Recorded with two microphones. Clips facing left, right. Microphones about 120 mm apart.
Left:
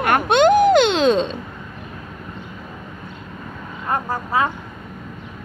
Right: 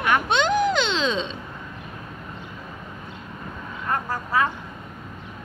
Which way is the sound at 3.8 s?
25° left (ahead or behind).